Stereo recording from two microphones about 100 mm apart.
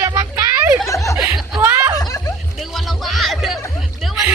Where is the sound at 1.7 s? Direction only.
25° right (ahead or behind).